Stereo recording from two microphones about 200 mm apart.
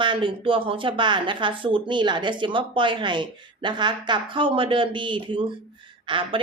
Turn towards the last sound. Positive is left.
turn(degrees=-25)  # may be behind; listen again after turning